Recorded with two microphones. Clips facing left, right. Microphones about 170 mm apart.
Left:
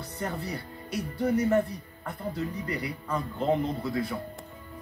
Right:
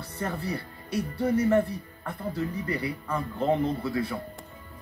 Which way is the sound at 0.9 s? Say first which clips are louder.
Right 1 dB; 30° right (ahead or behind).